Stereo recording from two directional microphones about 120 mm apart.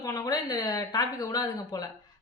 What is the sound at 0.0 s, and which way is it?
A woman's voice, 30° left (ahead or behind).